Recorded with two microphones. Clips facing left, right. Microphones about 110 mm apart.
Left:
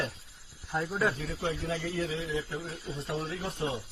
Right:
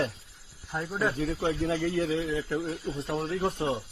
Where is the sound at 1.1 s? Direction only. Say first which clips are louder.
Right 6 dB; 50° right (ahead or behind).